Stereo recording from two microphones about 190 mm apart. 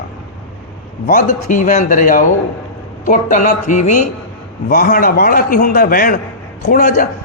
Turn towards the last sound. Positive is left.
turn(degrees=45)  # may be behind; listen again after turning